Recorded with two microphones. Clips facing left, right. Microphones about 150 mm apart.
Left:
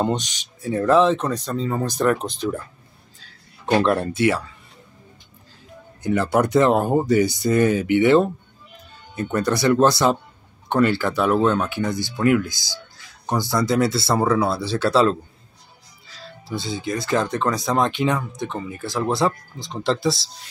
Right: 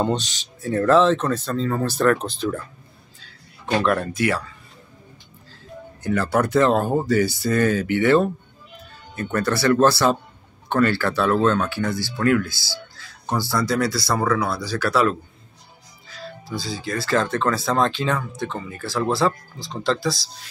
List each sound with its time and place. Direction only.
0.0 s speech: 15° left (ahead or behind)
3.8 s speech: 25° left (ahead or behind)
6.0 s speech: 20° left (ahead or behind)
16.4 s speech: 25° left (ahead or behind)